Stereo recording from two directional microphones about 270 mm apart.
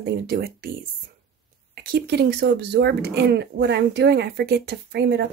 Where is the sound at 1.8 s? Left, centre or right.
Right.